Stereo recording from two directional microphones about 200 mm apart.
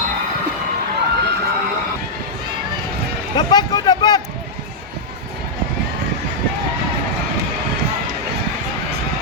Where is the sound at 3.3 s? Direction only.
20° left (ahead or behind).